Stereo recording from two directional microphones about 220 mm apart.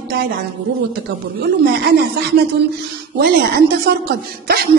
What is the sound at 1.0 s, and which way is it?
Speech, 50° right (ahead or behind).